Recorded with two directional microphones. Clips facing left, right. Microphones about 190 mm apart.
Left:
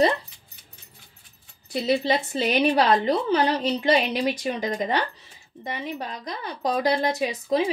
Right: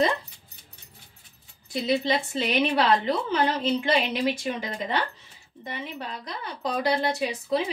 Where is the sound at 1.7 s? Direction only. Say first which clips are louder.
Left 2 dB; 40° left (ahead or behind).